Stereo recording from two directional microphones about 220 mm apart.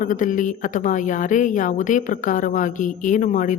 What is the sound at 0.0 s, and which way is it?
A woman's voice, 35° left (ahead or behind).